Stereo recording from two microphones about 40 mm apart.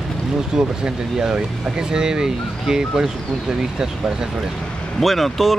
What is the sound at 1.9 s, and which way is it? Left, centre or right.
Speech, centre.